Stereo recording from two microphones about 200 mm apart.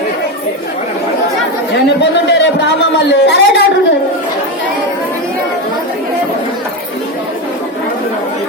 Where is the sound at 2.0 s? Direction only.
60° left (ahead or behind).